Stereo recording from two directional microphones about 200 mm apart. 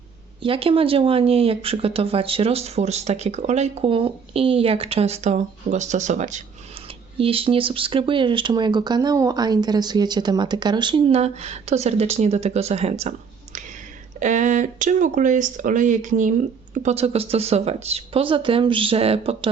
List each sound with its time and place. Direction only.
0.4 s speech: 25° right (ahead or behind)
14.2 s speech: 40° right (ahead or behind)